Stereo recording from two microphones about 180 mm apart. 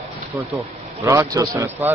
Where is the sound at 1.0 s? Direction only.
15° right (ahead or behind).